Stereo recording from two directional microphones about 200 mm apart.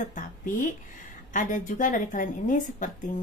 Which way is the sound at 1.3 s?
40° left (ahead or behind).